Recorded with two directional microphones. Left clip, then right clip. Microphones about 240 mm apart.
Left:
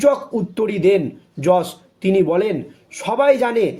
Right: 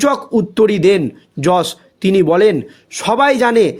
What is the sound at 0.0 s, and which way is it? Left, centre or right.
Speech, right.